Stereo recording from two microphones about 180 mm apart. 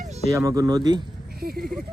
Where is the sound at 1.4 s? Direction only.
55° right (ahead or behind).